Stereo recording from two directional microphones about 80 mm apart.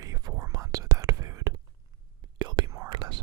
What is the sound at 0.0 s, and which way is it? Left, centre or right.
Whispering, right.